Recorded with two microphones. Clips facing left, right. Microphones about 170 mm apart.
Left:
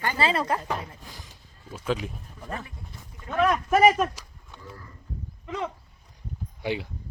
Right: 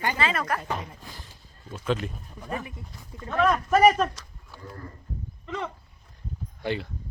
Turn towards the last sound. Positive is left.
turn(degrees=10)  # may be behind; listen again after turning